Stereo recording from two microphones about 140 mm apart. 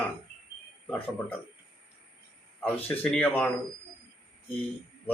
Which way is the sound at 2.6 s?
15° left (ahead or behind).